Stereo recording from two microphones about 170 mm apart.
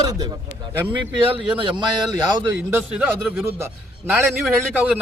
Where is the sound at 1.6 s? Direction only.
30° right (ahead or behind).